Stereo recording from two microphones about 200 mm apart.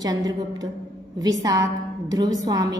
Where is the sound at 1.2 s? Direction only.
20° right (ahead or behind).